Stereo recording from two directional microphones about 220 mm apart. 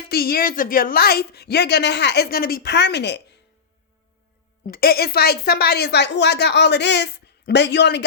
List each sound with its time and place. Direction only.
0.1 s a woman's voice: 45° left (ahead or behind)
4.6 s a woman's voice: 45° left (ahead or behind)